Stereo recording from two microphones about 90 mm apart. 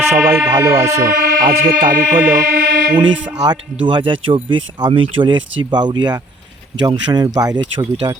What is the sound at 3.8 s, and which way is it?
Speech, 65° right (ahead or behind).